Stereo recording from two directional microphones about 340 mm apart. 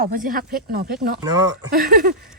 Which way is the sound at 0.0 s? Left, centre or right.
Right.